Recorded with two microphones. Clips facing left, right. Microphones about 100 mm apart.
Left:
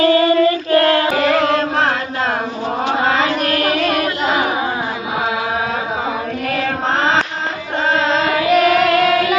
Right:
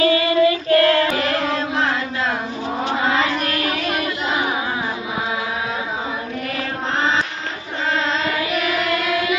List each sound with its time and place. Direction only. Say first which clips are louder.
0.0 s child singing: left 3 dB; 40° left (ahead or behind)
1.4 s music: left 5 dB; 65° left (ahead or behind)
2.9 s chant: left 3 dB; 60° left (ahead or behind)
7.9 s carnatic music: left 5 dB; 65° left (ahead or behind)